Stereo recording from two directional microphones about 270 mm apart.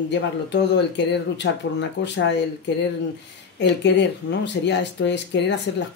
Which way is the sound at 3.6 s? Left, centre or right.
Left.